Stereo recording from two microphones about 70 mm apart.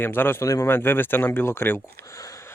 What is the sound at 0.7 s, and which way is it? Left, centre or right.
Speech, left.